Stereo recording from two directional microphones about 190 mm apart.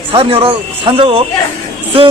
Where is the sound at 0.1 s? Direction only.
30° right (ahead or behind).